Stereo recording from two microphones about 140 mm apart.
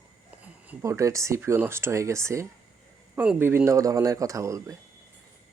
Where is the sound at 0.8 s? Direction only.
20° right (ahead or behind).